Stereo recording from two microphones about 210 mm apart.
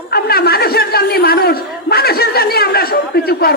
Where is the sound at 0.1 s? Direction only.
50° left (ahead or behind).